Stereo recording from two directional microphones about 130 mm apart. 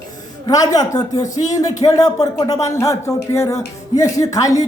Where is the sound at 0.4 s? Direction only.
30° left (ahead or behind).